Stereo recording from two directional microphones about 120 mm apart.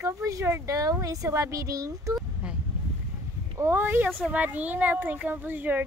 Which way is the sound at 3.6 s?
20° right (ahead or behind).